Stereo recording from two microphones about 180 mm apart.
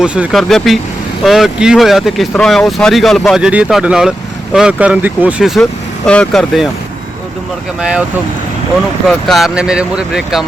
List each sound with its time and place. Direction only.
0.0 s speech: 5° right (ahead or behind)
7.8 s speech: 5° right (ahead or behind)
9.0 s speech: centre (ahead or behind)